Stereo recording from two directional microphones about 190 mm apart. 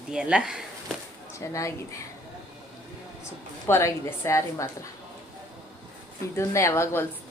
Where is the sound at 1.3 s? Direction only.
15° left (ahead or behind).